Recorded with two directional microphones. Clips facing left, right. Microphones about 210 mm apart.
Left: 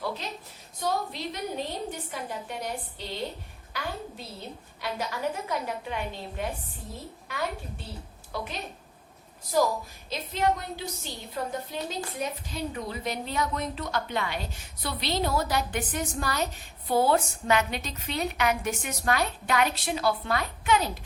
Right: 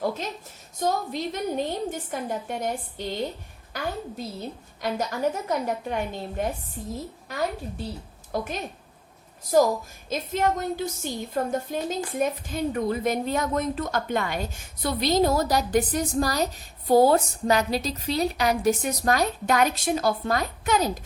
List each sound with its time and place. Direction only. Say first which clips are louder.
0.0 s a sound: right 6 dB; 45° right (ahead or behind)
0.8 s a woman's voice: right 4 dB; 45° right (ahead or behind)
4.4 s a woman's voice: right 5 dB; 45° right (ahead or behind)
8.3 s a woman's voice: right 6 dB; 50° right (ahead or behind)